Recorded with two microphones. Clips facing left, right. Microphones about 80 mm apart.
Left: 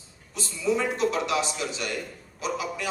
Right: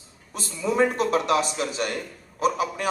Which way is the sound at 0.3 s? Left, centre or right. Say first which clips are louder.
Right 3 dB; right.